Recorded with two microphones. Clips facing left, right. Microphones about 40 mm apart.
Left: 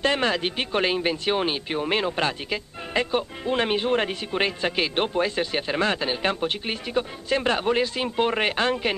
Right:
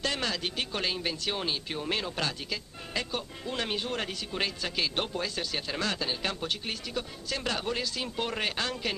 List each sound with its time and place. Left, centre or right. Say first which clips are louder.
0.0 s speech: left 9 dB; left